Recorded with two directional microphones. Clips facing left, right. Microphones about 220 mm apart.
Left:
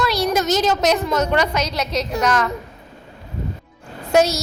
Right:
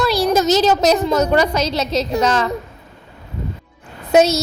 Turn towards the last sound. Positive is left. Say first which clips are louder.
# right 3 dB
turn(degrees=-20)  # may be behind; listen again after turning